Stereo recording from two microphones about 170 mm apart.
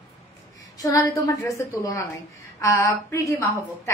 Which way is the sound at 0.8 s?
20° left (ahead or behind).